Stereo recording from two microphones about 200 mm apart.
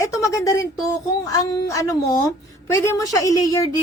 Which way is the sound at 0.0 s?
15° left (ahead or behind).